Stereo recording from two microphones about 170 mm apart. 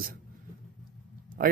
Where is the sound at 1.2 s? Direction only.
55° right (ahead or behind).